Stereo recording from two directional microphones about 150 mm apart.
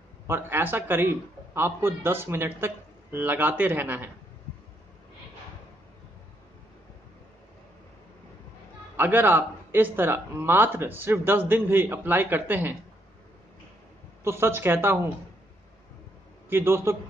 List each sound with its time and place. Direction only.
0.3 s a man's voice: 15° right (ahead or behind)
8.9 s a man's voice: 15° right (ahead or behind)
14.2 s a man's voice: 15° right (ahead or behind)
16.4 s a man's voice: 15° right (ahead or behind)